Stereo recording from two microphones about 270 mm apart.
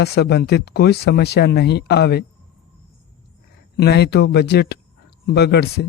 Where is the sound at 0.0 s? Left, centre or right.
Left.